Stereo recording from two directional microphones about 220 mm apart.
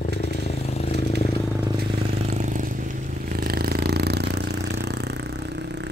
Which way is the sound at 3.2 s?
45° right (ahead or behind).